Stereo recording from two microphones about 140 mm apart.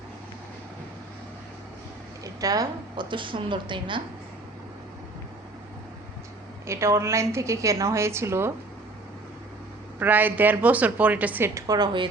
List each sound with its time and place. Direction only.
2.2 s a woman's voice: 25° right (ahead or behind)
6.7 s a woman's voice: 20° right (ahead or behind)
10.0 s a woman's voice: 15° right (ahead or behind); by 12.0 s 30° right (ahead or behind)